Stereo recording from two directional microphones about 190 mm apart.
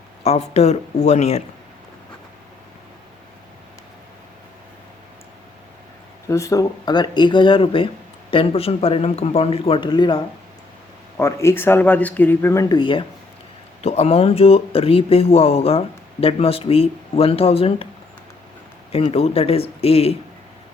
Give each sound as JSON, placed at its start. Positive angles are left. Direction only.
{"t": 0.2, "sound": "speech", "side_deg": 35}
{"t": 6.2, "sound": "speech", "side_deg": 15}
{"t": 11.2, "sound": "speech", "side_deg": 15}
{"t": 18.9, "sound": "speech", "side_deg": 30}